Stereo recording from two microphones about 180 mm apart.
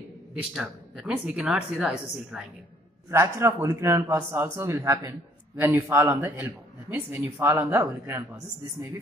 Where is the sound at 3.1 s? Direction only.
15° right (ahead or behind).